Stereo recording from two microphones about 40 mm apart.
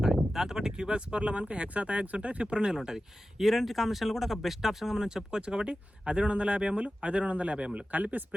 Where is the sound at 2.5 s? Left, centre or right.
Centre.